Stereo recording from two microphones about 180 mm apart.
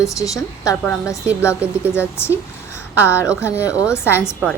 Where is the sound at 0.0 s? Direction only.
20° left (ahead or behind).